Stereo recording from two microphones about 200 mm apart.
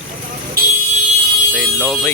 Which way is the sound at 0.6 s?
50° right (ahead or behind).